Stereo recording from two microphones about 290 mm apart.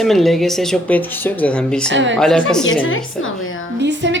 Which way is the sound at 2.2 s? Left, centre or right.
Centre.